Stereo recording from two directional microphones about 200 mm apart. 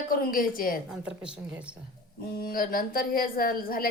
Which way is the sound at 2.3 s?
45° left (ahead or behind).